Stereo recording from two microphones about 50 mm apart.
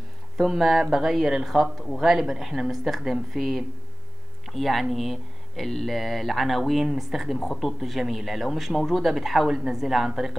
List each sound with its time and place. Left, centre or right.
0.4 s a woman's voice: centre